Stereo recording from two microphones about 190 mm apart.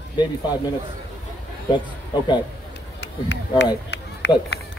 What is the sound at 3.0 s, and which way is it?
Speech, 65° left (ahead or behind).